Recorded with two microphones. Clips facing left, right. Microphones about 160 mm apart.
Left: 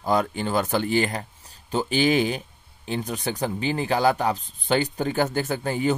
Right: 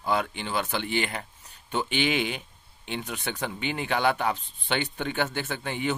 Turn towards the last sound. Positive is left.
turn(degrees=40)  # may be behind; listen again after turning